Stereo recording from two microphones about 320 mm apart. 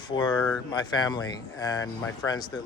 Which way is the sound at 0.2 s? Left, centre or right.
Centre.